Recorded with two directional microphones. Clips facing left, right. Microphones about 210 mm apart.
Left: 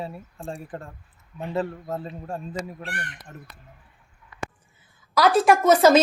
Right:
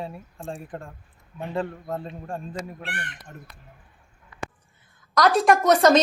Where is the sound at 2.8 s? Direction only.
40° left (ahead or behind).